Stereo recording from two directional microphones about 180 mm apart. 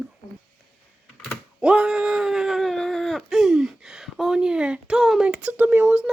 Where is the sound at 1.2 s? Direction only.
5° right (ahead or behind).